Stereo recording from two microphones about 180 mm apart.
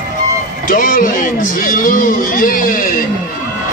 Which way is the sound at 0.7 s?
50° left (ahead or behind).